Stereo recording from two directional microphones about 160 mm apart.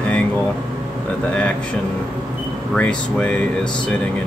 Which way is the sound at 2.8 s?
5° left (ahead or behind).